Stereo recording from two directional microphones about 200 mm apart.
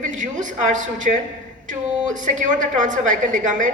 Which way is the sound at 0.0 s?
40° right (ahead or behind).